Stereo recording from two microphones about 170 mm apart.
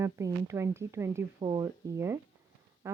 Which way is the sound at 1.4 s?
30° right (ahead or behind).